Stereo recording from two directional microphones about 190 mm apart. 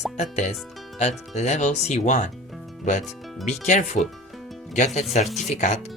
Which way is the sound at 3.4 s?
40° left (ahead or behind).